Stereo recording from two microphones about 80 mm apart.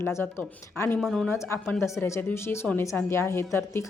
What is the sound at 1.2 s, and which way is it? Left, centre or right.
Speech, left.